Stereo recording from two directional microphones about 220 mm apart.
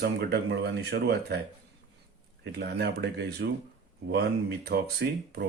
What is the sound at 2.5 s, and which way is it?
Speech, 50° right (ahead or behind).